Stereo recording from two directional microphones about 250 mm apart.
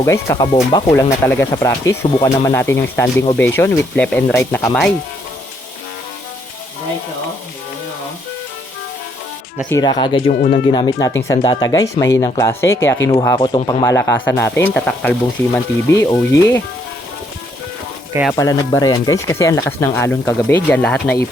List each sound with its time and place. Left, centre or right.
0.0 s speech: centre
9.6 s speech: centre
18.1 s speech: centre
18.3 s speech: centre